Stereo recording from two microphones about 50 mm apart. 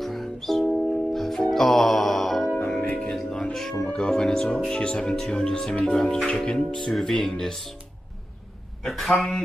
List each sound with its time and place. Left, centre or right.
0.0 s music: centre
2.5 s music: centre
3.1 s music: centre
3.8 s music: centre
4.6 s speech: centre
8.8 s a man's voice: centre